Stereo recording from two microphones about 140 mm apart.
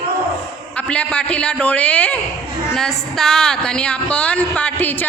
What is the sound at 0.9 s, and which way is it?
A woman's voice, 10° left (ahead or behind).